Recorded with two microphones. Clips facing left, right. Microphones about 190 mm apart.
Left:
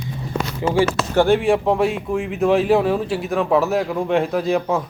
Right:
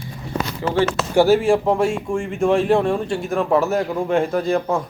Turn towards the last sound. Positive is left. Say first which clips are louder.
# even
turn(degrees=0)  # may be behind; listen again after turning